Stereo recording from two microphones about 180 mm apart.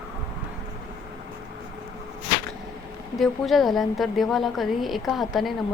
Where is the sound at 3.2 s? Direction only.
Centre (ahead or behind).